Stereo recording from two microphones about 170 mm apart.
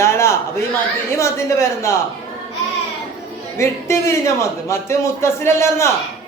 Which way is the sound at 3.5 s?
15° left (ahead or behind).